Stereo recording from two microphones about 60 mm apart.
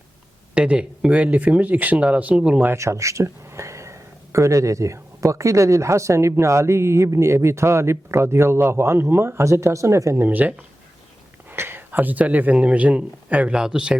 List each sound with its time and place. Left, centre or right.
0.5 s speech: centre
2.7 s speech: right
10.2 s speech: right
11.5 s a man's voice: right; by 13.9 s centre